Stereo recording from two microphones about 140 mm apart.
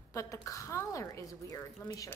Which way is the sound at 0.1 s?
20° left (ahead or behind).